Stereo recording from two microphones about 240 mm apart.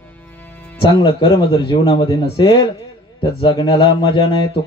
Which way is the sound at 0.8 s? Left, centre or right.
Centre.